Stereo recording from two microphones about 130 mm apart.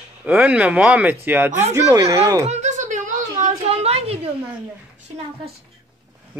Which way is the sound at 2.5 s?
65° right (ahead or behind).